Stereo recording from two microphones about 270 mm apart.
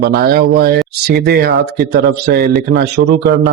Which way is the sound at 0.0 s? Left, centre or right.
Right.